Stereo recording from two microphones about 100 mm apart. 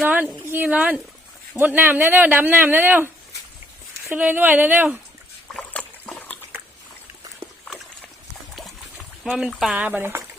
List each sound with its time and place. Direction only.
0.0 s a woman's voice: 15° right (ahead or behind)
4.1 s speech: 15° right (ahead or behind)
5.5 s trickle: 10° left (ahead or behind)
8.5 s a sound: 5° right (ahead or behind)
9.5 s speech: centre (ahead or behind)
9.7 s speech: 15° right (ahead or behind)